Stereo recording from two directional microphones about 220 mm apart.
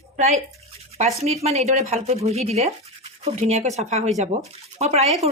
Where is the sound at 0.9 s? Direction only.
30° right (ahead or behind).